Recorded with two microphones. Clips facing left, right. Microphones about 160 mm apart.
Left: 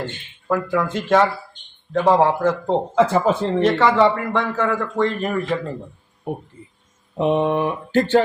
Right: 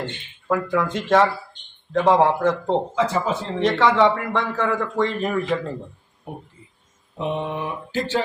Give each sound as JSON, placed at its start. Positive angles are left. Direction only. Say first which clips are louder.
{"t": 0.0, "sound": "a man's voice", "louder": "left 1 dB", "side_deg": 0}
{"t": 2.9, "sound": "speech", "louder": "left 5 dB", "side_deg": 55}
{"t": 3.6, "sound": "a man's voice", "louder": "even", "side_deg": 5}
{"t": 7.2, "sound": "speech", "louder": "left 8 dB", "side_deg": 60}